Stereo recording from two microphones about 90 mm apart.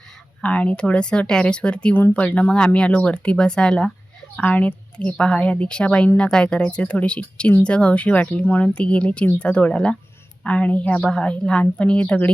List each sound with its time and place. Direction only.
0.4 s speech: 15° left (ahead or behind)